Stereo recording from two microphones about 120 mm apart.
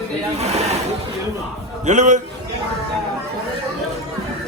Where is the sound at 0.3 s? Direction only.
65° right (ahead or behind).